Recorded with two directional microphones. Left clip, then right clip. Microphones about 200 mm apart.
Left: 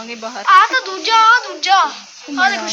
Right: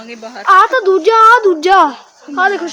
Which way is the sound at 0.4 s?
40° right (ahead or behind).